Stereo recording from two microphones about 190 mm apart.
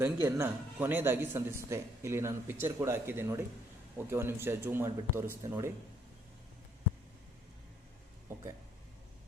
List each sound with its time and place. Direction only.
0.0 s speech: 15° right (ahead or behind)
8.3 s speech: 15° right (ahead or behind)